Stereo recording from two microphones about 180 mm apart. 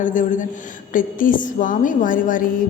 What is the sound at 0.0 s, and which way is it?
A woman's voice, 45° left (ahead or behind).